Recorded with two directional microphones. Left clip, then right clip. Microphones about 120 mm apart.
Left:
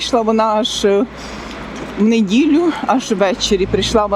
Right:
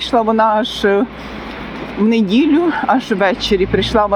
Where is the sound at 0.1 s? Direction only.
25° left (ahead or behind).